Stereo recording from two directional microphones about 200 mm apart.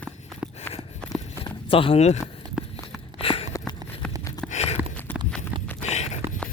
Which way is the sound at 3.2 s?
30° left (ahead or behind).